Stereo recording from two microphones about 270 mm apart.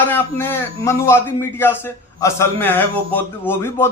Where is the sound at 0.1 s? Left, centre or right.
Centre.